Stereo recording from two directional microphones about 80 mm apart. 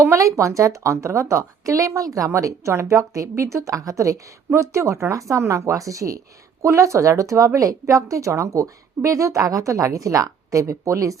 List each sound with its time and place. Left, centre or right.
0.0 s a woman's voice: right